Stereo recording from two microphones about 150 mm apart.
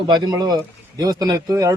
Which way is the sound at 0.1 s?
25° right (ahead or behind).